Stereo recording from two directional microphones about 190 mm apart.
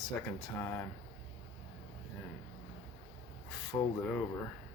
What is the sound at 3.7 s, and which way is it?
Speech, 15° left (ahead or behind).